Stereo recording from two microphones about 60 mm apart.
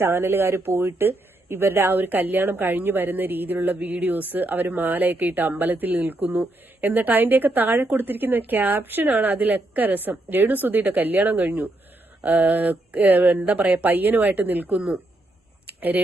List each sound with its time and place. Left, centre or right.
0.0 s speech: right; by 15.0 s centre